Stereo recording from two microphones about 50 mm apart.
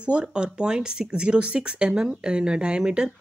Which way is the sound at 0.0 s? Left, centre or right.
Centre.